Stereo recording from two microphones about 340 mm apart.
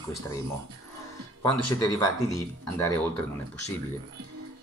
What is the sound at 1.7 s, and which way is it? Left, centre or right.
Speech, centre.